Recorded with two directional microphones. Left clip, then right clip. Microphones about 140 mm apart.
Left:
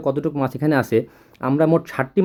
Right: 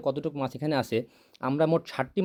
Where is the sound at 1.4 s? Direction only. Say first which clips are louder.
Left 7 dB; 40° right (ahead or behind).